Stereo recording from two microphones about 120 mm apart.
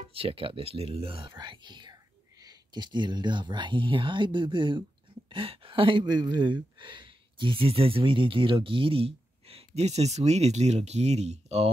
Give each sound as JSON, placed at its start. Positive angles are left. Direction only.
{"t": 0.1, "sound": "speech", "side_deg": -50}
{"t": 1.4, "sound": "speech", "side_deg": -40}